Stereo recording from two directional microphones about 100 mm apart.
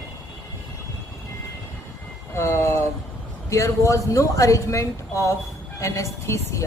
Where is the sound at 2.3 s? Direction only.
25° left (ahead or behind).